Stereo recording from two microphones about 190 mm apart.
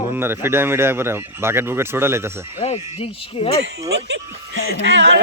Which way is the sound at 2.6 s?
35° left (ahead or behind).